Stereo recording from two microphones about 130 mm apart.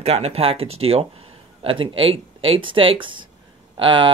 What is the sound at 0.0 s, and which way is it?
Speech, 50° right (ahead or behind).